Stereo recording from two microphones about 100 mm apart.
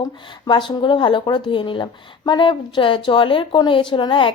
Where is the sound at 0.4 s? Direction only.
50° left (ahead or behind).